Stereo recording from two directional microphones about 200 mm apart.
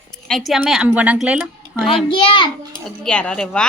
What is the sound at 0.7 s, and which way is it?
Speech, 5° right (ahead or behind).